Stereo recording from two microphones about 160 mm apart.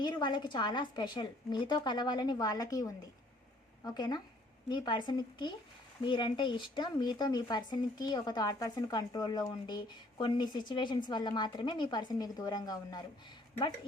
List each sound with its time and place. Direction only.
0.0 s speech: 25° left (ahead or behind)